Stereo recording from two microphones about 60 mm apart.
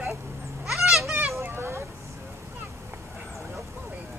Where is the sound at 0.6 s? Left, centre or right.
Centre.